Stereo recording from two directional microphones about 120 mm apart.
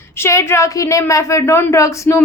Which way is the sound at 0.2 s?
20° left (ahead or behind).